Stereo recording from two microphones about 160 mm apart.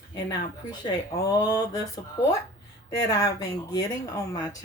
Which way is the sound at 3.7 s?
20° left (ahead or behind).